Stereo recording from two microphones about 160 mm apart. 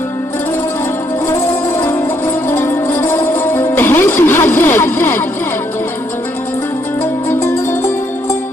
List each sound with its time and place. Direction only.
1.3 s music: 15° left (ahead or behind)
7.3 s music: 15° left (ahead or behind)